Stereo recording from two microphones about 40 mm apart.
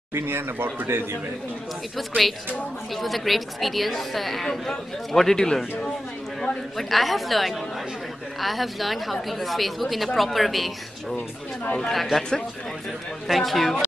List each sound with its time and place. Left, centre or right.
0.1 s speech: right
2.0 s a woman's voice: centre
6.8 s a woman's voice: centre
11.9 s a woman's voice: centre
12.2 s speech: centre
13.3 s a woman's voice: centre